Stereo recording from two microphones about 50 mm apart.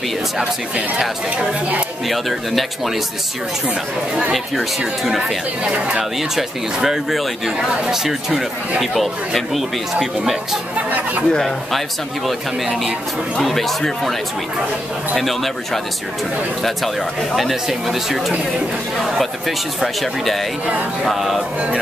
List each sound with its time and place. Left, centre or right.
0.4 s speech: centre
2.0 s speech: centre
4.3 s speech: centre
5.6 s speech: centre
6.3 s speech: centre
10.9 s speech: right
11.3 s speech: centre
13.4 s speech: centre
15.1 s speech: centre
17.4 s speech: centre